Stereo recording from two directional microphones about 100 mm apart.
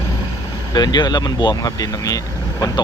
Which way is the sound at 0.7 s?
45° left (ahead or behind).